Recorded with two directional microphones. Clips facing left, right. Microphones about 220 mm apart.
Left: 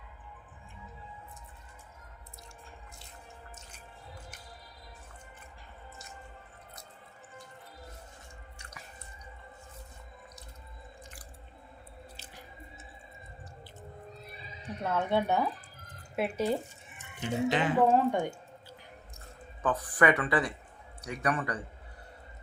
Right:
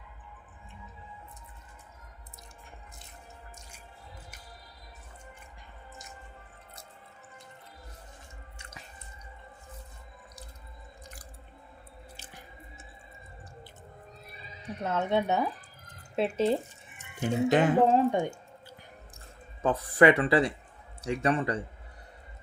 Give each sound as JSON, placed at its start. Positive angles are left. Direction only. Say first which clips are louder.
{"t": 14.8, "sound": "speech", "louder": "right 1 dB", "side_deg": -20}
{"t": 17.2, "sound": "speech", "louder": "right 5 dB", "side_deg": -45}
{"t": 17.8, "sound": "speech", "louder": "right 1 dB", "side_deg": -20}
{"t": 19.6, "sound": "speech", "louder": "right 5 dB", "side_deg": -25}